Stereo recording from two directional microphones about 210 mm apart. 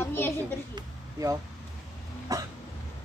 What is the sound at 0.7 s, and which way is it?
Speech, 15° right (ahead or behind).